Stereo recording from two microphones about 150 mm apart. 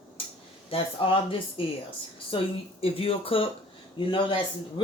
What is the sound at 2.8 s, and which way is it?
Speech, 40° left (ahead or behind).